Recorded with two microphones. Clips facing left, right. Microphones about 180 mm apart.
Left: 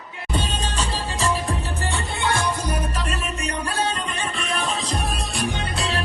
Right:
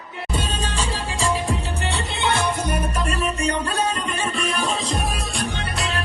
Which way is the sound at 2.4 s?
55° right (ahead or behind).